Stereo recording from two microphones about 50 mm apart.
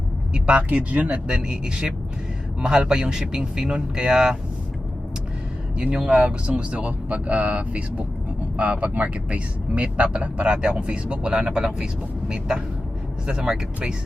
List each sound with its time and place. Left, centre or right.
0.3 s speech: right
1.3 s speech: centre
5.7 s speech: centre